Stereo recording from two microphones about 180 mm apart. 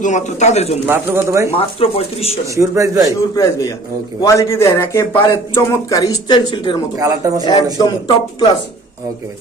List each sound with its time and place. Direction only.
0.0 s speech: 40° left (ahead or behind)
0.9 s speech: 15° right (ahead or behind)
1.5 s speech: 30° left (ahead or behind)
2.6 s speech: 15° right (ahead or behind)
4.2 s speech: 15° left (ahead or behind)
7.0 s speech: 20° right (ahead or behind)
7.4 s a man's voice: 25° left (ahead or behind)